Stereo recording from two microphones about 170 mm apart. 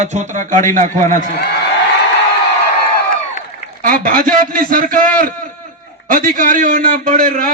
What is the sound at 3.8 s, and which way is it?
A man's voice, 55° right (ahead or behind).